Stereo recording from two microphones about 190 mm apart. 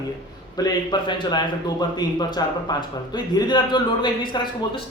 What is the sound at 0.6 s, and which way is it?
Speech, 20° left (ahead or behind).